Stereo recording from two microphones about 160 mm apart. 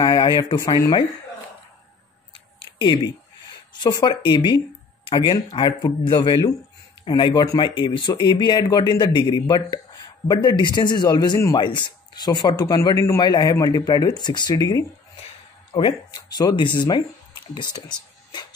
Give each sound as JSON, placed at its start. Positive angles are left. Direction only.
{"t": 0.0, "sound": "speech", "side_deg": 25}
{"t": 2.3, "sound": "a sound", "side_deg": 30}
{"t": 3.8, "sound": "speech", "side_deg": 30}